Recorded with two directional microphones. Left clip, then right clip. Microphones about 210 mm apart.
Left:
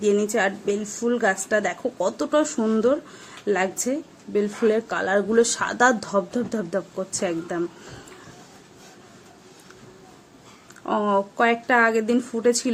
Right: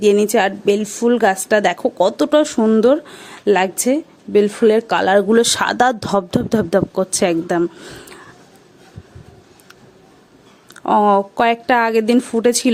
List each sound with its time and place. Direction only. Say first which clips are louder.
0.0 s a woman's voice: right 7 dB; 40° right (ahead or behind)
10.8 s a woman's voice: right 9 dB; 35° right (ahead or behind)